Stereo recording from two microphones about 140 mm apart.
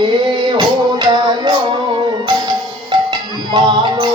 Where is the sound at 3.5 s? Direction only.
30° right (ahead or behind).